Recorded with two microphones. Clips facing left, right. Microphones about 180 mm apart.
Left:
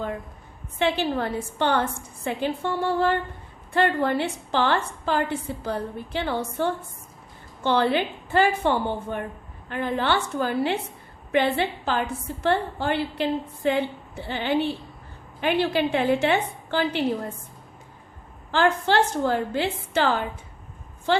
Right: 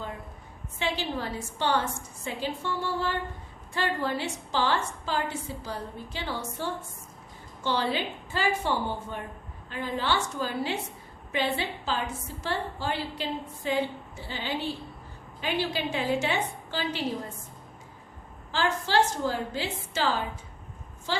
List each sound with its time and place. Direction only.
0.8 s a woman's voice: 60° left (ahead or behind)
18.5 s a woman's voice: 60° left (ahead or behind)